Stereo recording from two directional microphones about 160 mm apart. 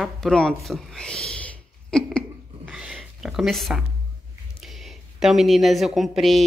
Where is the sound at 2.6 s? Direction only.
5° right (ahead or behind).